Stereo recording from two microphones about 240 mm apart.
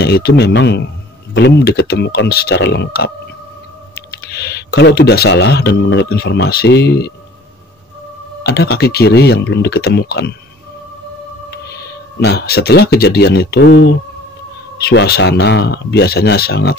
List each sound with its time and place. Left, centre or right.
0.0 s speech: left
4.3 s speech: left
8.5 s speech: left
12.2 s speech: left
14.9 s speech: left